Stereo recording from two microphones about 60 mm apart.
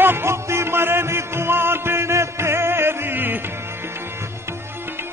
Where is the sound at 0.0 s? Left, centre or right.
Right.